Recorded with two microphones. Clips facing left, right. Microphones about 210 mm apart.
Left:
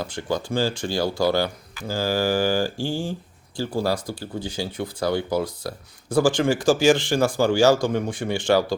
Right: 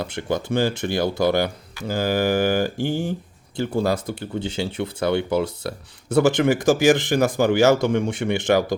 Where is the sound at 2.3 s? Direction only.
60° right (ahead or behind).